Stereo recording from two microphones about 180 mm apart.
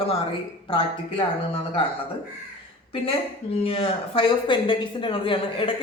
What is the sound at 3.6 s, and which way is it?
Speech, 30° left (ahead or behind).